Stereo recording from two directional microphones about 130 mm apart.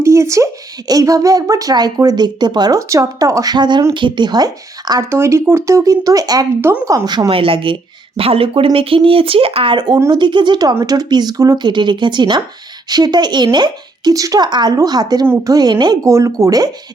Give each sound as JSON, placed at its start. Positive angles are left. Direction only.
{"t": 0.0, "sound": "speech", "side_deg": -20}
{"t": 6.6, "sound": "a woman's voice", "side_deg": -20}